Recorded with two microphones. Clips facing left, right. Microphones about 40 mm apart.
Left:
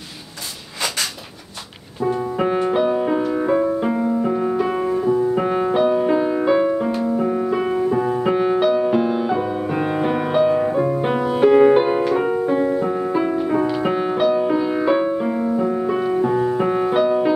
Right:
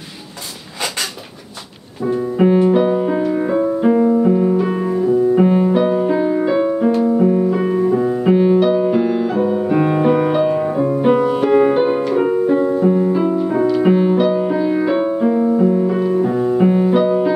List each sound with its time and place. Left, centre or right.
2.0 s music: centre
7.2 s music: centre